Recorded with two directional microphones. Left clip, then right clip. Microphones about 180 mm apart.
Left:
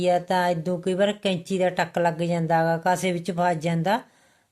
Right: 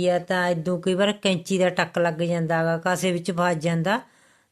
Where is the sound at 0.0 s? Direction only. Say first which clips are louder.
Left 1 dB; 10° right (ahead or behind).